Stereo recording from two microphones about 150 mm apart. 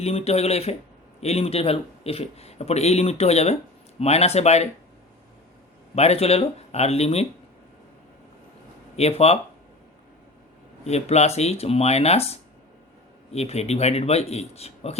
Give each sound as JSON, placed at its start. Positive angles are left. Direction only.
{"t": 0.0, "sound": "speech", "side_deg": 45}
{"t": 5.9, "sound": "speech", "side_deg": 45}
{"t": 9.0, "sound": "speech", "side_deg": 45}
{"t": 10.8, "sound": "speech", "side_deg": 45}